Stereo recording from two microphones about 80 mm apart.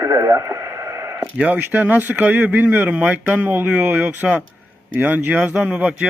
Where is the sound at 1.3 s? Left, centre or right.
Centre.